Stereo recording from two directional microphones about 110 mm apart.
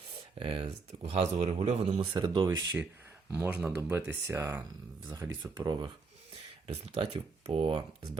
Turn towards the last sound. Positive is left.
turn(degrees=-65)  # may be behind; listen again after turning